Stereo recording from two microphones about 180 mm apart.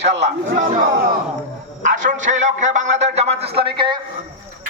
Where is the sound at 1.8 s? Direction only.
45° right (ahead or behind).